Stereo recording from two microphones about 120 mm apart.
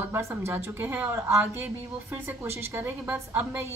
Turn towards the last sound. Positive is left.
turn(degrees=-20)  # may be behind; listen again after turning